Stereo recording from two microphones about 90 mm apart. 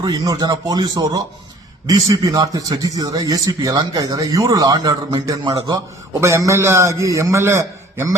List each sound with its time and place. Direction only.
0.0 s a man's voice: 45° right (ahead or behind)